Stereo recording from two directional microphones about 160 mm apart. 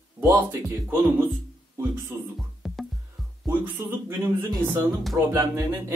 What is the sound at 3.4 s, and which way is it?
Speech, 15° right (ahead or behind).